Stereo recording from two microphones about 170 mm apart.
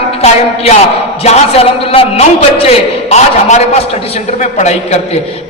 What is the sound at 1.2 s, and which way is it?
A man's voice, 35° left (ahead or behind).